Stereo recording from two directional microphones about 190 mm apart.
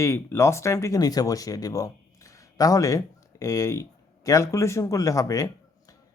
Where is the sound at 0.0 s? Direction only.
15° left (ahead or behind).